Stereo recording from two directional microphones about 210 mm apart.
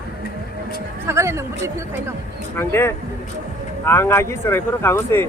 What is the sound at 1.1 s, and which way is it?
Speech, 15° right (ahead or behind).